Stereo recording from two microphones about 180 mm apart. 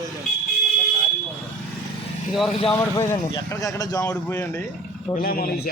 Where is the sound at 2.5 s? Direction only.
30° left (ahead or behind).